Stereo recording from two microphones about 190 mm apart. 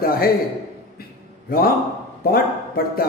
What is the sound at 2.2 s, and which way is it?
Speech, 50° left (ahead or behind).